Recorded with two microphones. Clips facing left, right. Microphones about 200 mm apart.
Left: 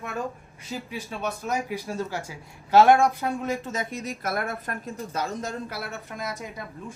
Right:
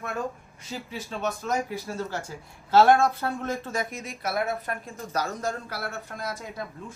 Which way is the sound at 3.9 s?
35° left (ahead or behind).